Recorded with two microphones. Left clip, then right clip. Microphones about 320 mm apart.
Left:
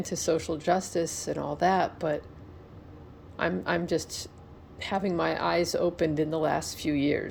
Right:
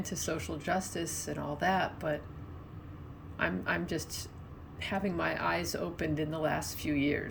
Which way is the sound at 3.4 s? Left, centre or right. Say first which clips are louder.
Left 4 dB; centre.